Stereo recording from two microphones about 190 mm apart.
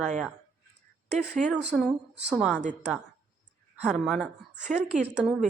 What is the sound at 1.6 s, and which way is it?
Speech, centre (ahead or behind).